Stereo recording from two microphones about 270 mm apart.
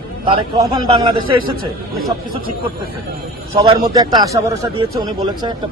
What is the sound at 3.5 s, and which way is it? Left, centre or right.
Speech, centre.